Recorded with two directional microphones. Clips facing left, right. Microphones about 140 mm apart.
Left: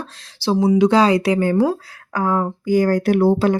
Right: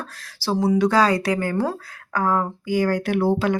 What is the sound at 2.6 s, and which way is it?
Speech, 45° left (ahead or behind).